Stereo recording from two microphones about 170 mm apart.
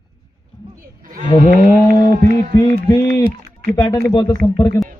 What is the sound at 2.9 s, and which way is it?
A man's voice, 20° left (ahead or behind).